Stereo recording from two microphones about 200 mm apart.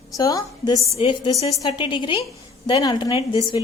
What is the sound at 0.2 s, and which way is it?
A woman's voice, 15° left (ahead or behind).